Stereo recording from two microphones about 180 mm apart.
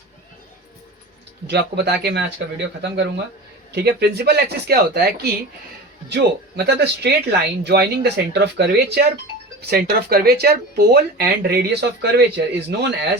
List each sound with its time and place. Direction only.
1.5 s speech: 65° right (ahead or behind)
6.6 s speech: 65° right (ahead or behind)